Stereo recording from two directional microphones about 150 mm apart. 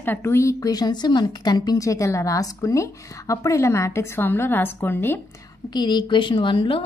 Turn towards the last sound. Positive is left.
turn(degrees=35)  # may be behind; listen again after turning